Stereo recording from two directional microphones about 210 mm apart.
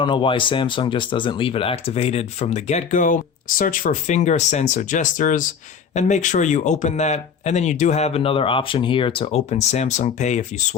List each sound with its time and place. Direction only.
0.0 s speech: 25° left (ahead or behind)